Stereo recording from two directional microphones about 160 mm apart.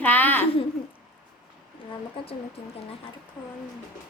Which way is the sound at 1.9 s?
35° left (ahead or behind).